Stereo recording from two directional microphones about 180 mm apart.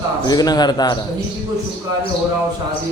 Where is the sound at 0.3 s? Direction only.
20° left (ahead or behind).